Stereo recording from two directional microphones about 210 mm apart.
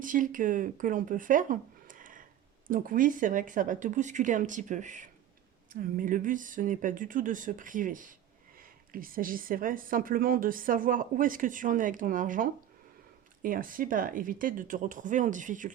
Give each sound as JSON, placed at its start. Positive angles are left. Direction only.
{"t": 0.0, "sound": "speech", "side_deg": -40}